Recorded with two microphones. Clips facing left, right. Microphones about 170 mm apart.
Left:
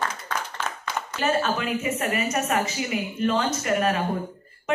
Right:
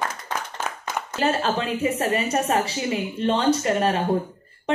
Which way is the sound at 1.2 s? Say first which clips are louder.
Right 1 dB; 35° right (ahead or behind).